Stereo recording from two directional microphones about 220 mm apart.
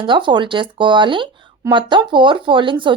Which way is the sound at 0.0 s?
20° right (ahead or behind).